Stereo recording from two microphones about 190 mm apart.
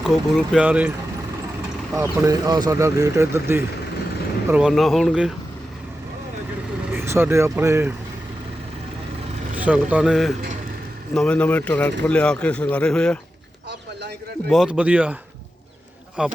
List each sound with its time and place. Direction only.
0.0 s speech: centre (ahead or behind)
2.0 s speech: 15° right (ahead or behind); by 5.3 s centre (ahead or behind)
6.9 s speech: 15° right (ahead or behind)
9.6 s speech: 5° right (ahead or behind)
14.5 s speech: 5° right (ahead or behind)
16.2 s speech: 5° right (ahead or behind)